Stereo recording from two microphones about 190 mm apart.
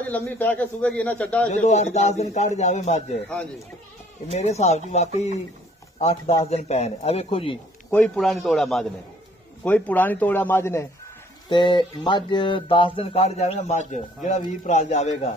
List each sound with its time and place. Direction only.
0.0 s a man's voice: 10° left (ahead or behind)
1.5 s speech: 40° left (ahead or behind)
3.3 s a man's voice: 5° left (ahead or behind)
4.3 s speech: 35° left (ahead or behind)
7.9 s a man's voice: 5° left (ahead or behind)
11.4 s speech: 25° left (ahead or behind)